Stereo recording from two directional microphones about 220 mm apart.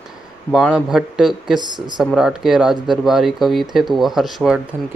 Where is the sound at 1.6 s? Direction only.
20° right (ahead or behind).